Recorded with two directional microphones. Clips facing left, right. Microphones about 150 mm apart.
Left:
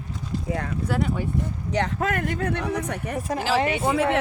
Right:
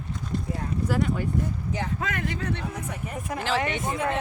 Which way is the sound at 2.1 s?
50° left (ahead or behind).